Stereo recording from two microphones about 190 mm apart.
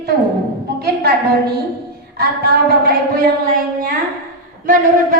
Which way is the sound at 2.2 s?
55° right (ahead or behind).